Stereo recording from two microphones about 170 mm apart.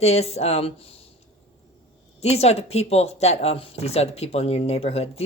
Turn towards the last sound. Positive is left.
turn(degrees=35)  # may be behind; listen again after turning